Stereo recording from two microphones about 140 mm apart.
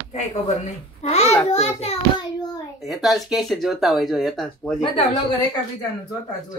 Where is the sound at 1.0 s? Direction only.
50° left (ahead or behind).